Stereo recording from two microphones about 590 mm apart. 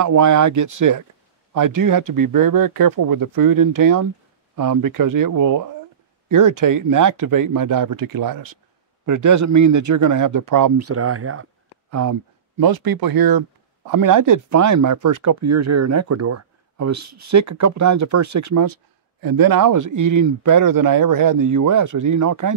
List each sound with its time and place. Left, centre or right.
0.0 s speech: right